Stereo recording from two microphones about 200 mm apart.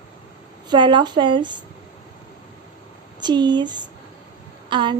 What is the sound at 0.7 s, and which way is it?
Speech, 25° right (ahead or behind).